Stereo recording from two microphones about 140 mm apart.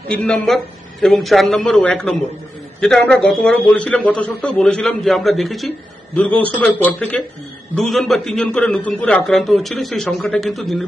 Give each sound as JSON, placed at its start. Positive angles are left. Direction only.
{"t": 0.1, "sound": "a man's voice", "side_deg": 5}